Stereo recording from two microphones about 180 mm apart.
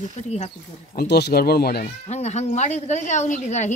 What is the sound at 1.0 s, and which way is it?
Speech, 65° left (ahead or behind).